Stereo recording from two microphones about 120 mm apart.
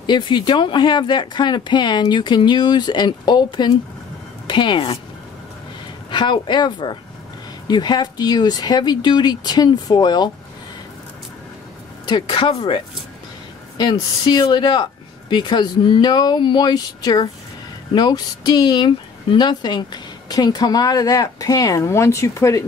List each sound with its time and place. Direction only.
0.0 s speech: 40° left (ahead or behind)
6.0 s speech: 40° left (ahead or behind)
12.1 s speech: 45° left (ahead or behind); by 22.7 s 25° left (ahead or behind)